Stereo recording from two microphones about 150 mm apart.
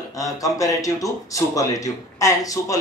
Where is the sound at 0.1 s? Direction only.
20° left (ahead or behind).